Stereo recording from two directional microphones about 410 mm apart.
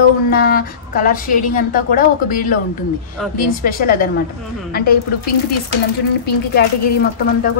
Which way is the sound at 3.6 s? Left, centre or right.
Left.